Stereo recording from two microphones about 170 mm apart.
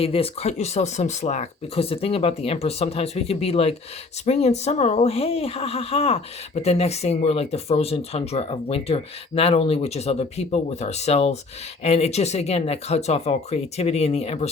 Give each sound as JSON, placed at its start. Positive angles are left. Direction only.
{"t": 0.0, "sound": "speech", "side_deg": 35}